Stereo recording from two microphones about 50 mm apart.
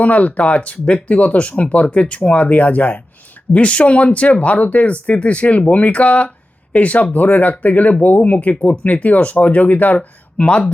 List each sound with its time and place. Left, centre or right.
0.0 s speech: left